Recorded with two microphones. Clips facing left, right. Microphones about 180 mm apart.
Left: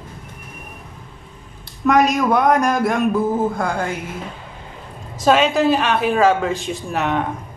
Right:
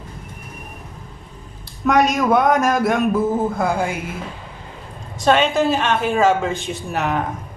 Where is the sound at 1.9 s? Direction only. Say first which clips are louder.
Even; centre (ahead or behind).